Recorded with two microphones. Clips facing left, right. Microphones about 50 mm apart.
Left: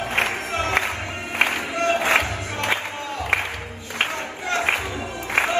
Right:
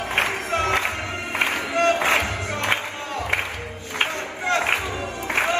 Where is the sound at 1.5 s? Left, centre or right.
Right.